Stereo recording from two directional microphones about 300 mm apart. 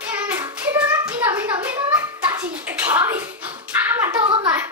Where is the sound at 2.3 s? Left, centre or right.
Centre.